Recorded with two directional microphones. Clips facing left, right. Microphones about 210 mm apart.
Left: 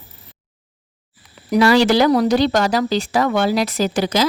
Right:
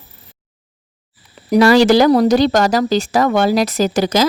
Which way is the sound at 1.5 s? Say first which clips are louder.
Right 4 dB; 40° right (ahead or behind).